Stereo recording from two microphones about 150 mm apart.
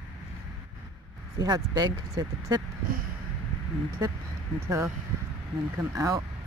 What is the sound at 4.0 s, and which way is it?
Speech, 25° right (ahead or behind).